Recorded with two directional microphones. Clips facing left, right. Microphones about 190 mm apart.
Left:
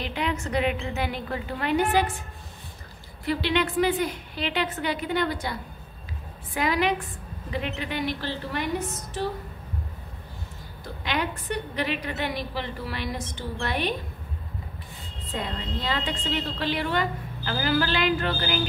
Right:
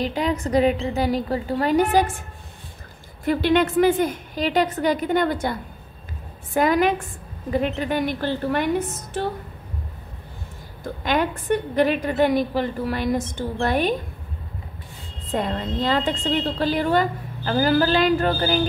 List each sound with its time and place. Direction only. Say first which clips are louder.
0.0 s a woman's voice: right 6 dB; 40° right (ahead or behind)
3.3 s a woman's voice: right 6 dB; 50° right (ahead or behind)
10.8 s a woman's voice: right 7 dB; 50° right (ahead or behind)
15.3 s a woman's voice: right 7 dB; 45° right (ahead or behind)